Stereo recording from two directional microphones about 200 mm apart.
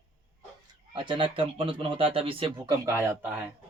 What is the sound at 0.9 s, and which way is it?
Speech, 25° right (ahead or behind).